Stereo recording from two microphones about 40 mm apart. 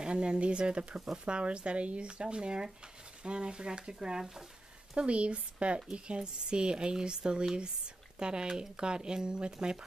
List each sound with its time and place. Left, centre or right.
0.0 s speech: right
4.9 s speech: right